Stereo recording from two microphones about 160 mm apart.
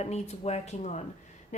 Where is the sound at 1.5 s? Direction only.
45° left (ahead or behind).